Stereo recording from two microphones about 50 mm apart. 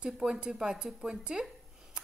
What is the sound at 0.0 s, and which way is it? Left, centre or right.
A woman's voice, centre.